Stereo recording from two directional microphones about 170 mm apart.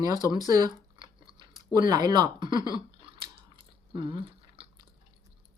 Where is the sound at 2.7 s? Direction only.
30° right (ahead or behind).